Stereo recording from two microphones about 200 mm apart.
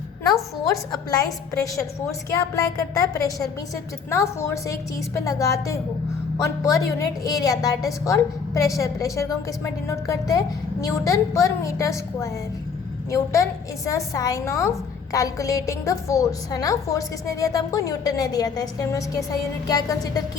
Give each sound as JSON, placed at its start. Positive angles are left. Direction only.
{"t": 0.9, "sound": "a woman's voice", "side_deg": 15}
{"t": 19.6, "sound": "music", "side_deg": 20}